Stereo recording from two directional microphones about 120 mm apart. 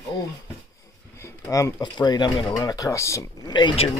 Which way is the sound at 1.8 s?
40° left (ahead or behind).